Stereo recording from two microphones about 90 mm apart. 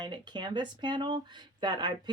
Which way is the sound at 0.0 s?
60° right (ahead or behind).